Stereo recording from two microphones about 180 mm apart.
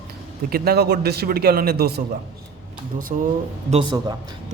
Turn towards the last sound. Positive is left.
turn(degrees=-25)  # may be behind; listen again after turning